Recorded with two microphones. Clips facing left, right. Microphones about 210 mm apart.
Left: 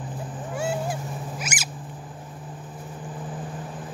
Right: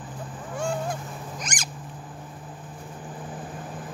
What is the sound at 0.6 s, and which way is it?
Boat, 5° left (ahead or behind).